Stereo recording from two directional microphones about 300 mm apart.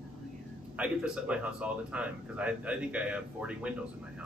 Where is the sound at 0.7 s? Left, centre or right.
Centre.